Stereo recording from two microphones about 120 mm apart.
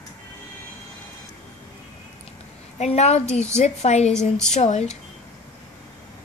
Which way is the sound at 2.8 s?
65° left (ahead or behind).